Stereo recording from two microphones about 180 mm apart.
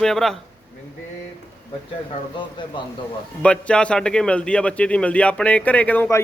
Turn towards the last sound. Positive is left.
turn(degrees=10)  # may be behind; listen again after turning